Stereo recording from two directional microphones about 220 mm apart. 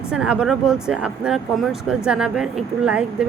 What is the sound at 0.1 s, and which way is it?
Speech, 5° right (ahead or behind).